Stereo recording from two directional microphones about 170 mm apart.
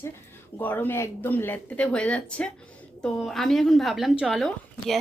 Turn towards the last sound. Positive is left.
turn(degrees=0)  # may be behind; listen again after turning